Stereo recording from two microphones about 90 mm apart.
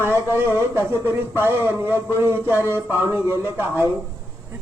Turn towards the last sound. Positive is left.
turn(degrees=-25)  # may be behind; listen again after turning